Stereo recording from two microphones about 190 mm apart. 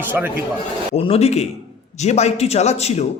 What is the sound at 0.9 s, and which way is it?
A man's voice, 35° left (ahead or behind).